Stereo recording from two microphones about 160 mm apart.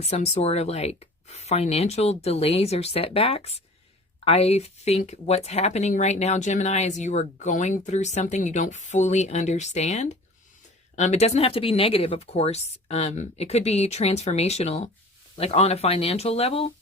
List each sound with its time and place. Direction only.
0.0 s speech: 40° left (ahead or behind)